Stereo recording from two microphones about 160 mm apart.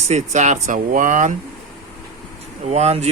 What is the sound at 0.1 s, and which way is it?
Speech, 45° right (ahead or behind).